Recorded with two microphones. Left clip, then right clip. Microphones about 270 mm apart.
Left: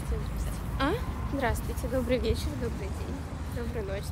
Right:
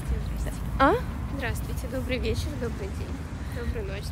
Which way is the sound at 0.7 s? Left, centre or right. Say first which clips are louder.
Right 9 dB; right.